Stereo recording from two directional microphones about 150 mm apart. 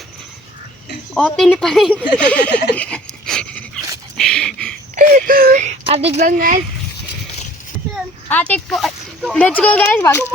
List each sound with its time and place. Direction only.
1.1 s speech: 5° left (ahead or behind)
2.7 s a sound: 5° left (ahead or behind)
4.9 s wail: 60° right (ahead or behind)
5.6 s a sound: 40° right (ahead or behind)
6.2 s speech: 65° right (ahead or behind)
8.3 s speech: 10° left (ahead or behind)